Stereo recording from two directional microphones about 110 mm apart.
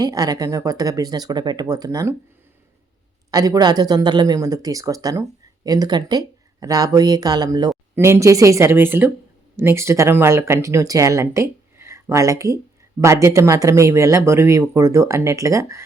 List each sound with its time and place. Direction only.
0.0 s speech: 35° right (ahead or behind)
3.3 s speech: 35° right (ahead or behind)
7.9 s speech: 25° right (ahead or behind)